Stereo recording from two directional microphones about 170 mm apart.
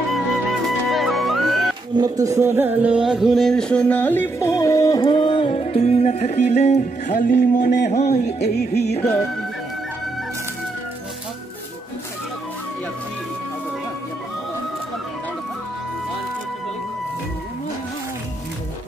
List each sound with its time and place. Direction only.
0.8 s music: centre (ahead or behind)
2.0 s music: 20° right (ahead or behind); by 7.7 s 50° left (ahead or behind)
7.9 s a man's voice: 45° left (ahead or behind)
8.4 s music: 70° left (ahead or behind)